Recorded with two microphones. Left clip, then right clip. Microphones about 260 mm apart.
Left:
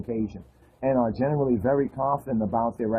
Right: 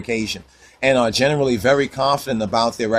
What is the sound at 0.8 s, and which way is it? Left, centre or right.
Speech, right.